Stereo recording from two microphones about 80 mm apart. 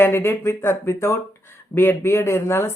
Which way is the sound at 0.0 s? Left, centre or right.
Left.